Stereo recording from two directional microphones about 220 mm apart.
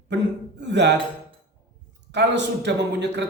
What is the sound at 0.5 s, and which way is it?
Speech, 50° right (ahead or behind).